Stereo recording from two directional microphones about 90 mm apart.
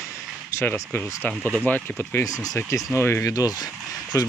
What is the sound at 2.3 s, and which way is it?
Speech, 40° left (ahead or behind).